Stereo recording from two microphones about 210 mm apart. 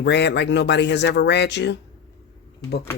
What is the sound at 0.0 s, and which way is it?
Speech, 55° left (ahead or behind).